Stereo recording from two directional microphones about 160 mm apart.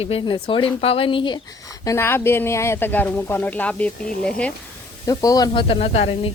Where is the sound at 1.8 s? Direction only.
15° left (ahead or behind).